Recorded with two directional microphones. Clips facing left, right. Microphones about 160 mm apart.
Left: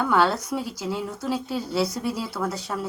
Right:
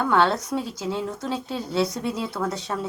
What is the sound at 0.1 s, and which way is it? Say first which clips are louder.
A woman's voice: right 1 dB; 5° left (ahead or behind).